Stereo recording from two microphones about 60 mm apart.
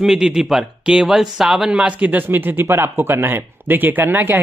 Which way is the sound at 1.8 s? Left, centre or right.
Right.